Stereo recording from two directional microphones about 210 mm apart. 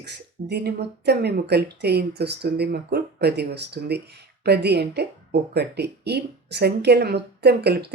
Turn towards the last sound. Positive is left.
turn(degrees=-50)  # may be behind; listen again after turning